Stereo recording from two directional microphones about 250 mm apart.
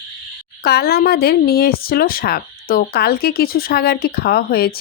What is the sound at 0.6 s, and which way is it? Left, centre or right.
Speech, left.